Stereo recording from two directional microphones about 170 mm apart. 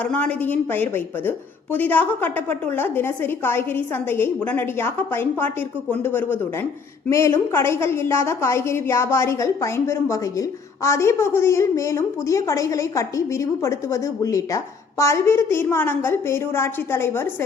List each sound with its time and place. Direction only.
0.0 s a woman's voice: 10° left (ahead or behind)